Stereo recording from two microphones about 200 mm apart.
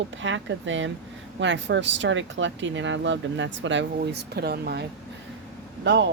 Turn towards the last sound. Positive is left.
turn(degrees=-60)  # may be behind; listen again after turning